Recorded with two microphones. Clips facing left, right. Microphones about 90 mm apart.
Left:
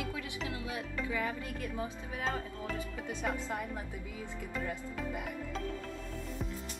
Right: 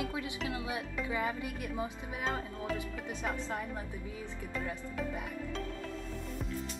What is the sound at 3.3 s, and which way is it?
Speech, 15° left (ahead or behind).